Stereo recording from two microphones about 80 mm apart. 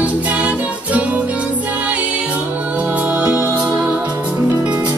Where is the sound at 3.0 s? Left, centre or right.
Centre.